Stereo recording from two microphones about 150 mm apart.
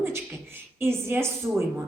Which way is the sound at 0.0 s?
15° right (ahead or behind).